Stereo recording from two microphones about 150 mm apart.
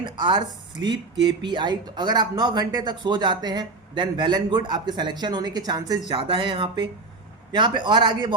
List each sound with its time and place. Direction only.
0.0 s a man's voice: 30° right (ahead or behind)